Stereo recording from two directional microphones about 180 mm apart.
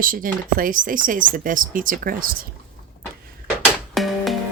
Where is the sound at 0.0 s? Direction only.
50° right (ahead or behind).